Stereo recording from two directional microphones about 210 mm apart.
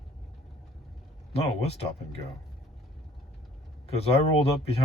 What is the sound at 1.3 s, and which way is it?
Speech, 30° left (ahead or behind).